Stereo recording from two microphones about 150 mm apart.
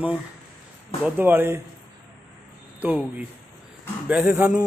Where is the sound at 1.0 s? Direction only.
15° right (ahead or behind).